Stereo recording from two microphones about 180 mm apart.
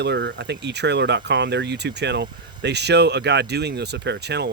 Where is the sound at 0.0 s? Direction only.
75° right (ahead or behind).